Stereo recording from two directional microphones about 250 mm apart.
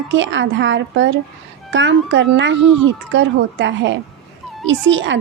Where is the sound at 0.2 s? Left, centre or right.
Right.